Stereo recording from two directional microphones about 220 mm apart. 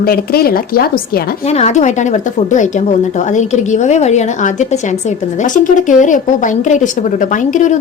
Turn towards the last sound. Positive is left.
turn(degrees=35)  # may be behind; listen again after turning